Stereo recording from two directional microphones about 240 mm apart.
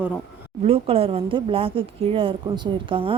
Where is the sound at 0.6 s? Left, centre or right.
Right.